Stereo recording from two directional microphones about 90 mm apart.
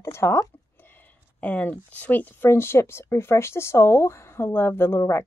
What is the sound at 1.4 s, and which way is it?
Speech, 15° left (ahead or behind).